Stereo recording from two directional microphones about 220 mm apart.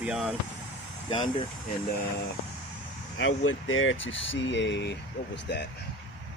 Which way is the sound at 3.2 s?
65° left (ahead or behind).